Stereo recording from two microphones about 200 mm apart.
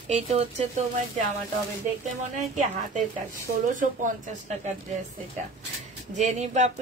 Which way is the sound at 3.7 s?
40° right (ahead or behind).